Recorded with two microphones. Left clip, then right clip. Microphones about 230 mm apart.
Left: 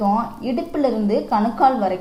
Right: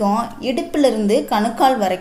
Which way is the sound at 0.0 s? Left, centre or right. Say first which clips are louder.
Right 1 dB; right.